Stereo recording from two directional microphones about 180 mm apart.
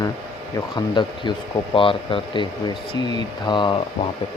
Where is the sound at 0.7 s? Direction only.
25° left (ahead or behind).